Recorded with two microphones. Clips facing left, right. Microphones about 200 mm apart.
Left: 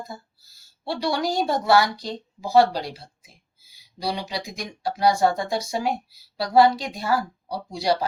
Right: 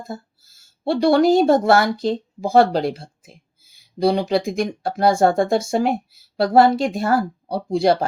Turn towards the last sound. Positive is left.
turn(degrees=-55)  # may be behind; listen again after turning